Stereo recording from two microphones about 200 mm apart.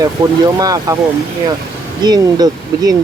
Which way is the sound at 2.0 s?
20° right (ahead or behind).